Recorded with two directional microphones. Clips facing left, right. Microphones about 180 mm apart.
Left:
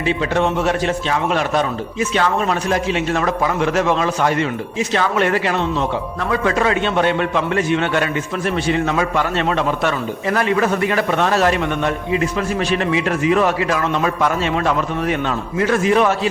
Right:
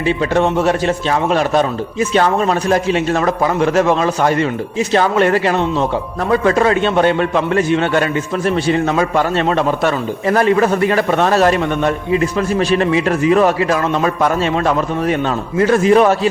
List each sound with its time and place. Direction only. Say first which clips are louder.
0.0 s a man's voice: right 3 dB; 40° right (ahead or behind)